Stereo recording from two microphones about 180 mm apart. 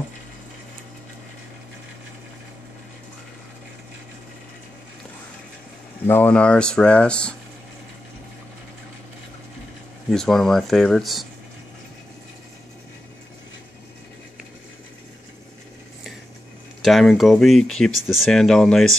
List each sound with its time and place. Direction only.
6.0 s speech: 10° left (ahead or behind)
10.1 s speech: centre (ahead or behind)
16.8 s speech: centre (ahead or behind)